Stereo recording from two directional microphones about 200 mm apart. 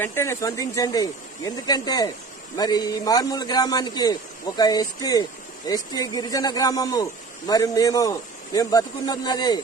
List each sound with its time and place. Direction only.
0.0 s a man's voice: 15° left (ahead or behind)